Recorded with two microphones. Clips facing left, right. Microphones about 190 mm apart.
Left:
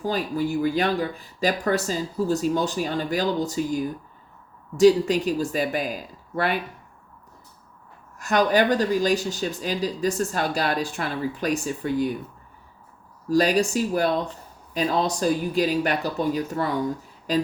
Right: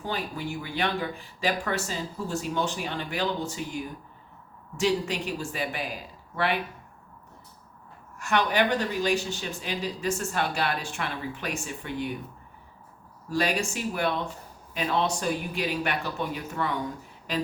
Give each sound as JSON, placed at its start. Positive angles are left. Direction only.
{"t": 0.0, "sound": "speech", "side_deg": 40}
{"t": 8.2, "sound": "speech", "side_deg": 40}
{"t": 13.2, "sound": "speech", "side_deg": 40}